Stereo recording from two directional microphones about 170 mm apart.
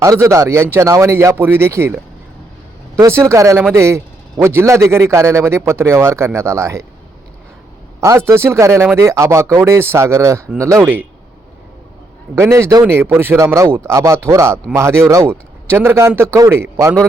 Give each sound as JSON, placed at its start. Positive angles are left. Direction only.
{"t": 0.0, "sound": "speech", "side_deg": -15}
{"t": 3.0, "sound": "speech", "side_deg": -15}
{"t": 8.0, "sound": "speech", "side_deg": -15}
{"t": 12.3, "sound": "speech", "side_deg": -15}